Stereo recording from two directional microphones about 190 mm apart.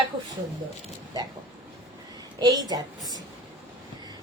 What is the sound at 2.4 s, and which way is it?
Speech, 20° right (ahead or behind).